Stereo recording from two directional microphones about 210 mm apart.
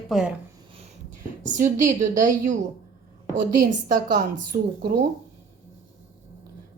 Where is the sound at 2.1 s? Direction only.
40° right (ahead or behind).